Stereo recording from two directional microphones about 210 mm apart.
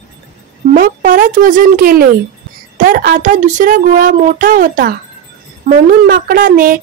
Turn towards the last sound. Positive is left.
turn(degrees=-45)  # may be behind; listen again after turning